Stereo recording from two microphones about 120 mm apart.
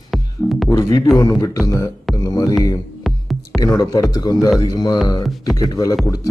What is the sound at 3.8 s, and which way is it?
A man's voice, 30° left (ahead or behind).